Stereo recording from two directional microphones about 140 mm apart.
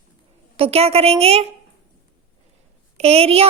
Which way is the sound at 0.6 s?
45° right (ahead or behind).